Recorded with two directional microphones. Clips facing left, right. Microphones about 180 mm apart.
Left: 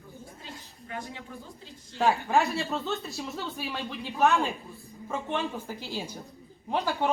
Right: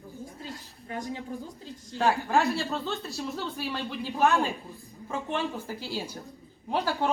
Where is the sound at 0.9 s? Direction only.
35° right (ahead or behind).